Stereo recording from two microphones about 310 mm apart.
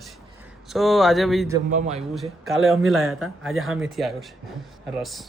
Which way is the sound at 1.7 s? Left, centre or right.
Right.